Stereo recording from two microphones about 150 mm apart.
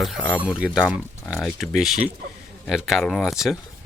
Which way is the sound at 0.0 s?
Centre (ahead or behind).